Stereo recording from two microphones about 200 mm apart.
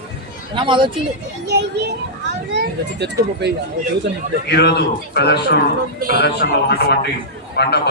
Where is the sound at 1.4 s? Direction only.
55° right (ahead or behind).